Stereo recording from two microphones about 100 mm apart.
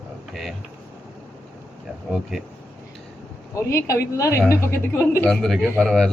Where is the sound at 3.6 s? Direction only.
30° left (ahead or behind).